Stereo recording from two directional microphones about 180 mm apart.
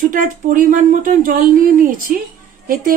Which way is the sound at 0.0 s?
50° right (ahead or behind).